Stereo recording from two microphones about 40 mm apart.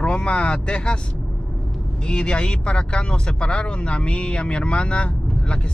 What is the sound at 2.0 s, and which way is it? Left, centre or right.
Speech, left.